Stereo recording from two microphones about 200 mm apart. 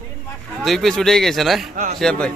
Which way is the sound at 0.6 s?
Centre (ahead or behind).